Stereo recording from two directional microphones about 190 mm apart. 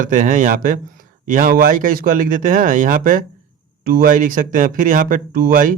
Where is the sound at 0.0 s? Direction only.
40° right (ahead or behind).